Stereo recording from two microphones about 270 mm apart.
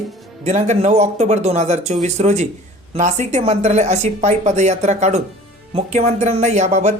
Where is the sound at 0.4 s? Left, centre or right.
Right.